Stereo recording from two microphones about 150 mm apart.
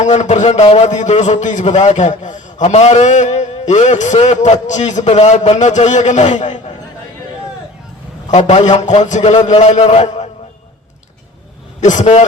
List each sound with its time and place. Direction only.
0.0 s a man's voice: 50° left (ahead or behind)
8.3 s a man's voice: 50° left (ahead or behind)
11.8 s a man's voice: 55° left (ahead or behind)